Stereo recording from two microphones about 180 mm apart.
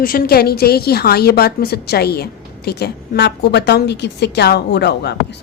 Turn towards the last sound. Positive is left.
turn(degrees=65)  # may be behind; listen again after turning